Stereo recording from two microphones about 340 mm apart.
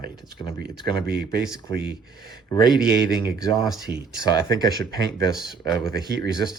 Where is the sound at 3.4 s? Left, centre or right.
Centre.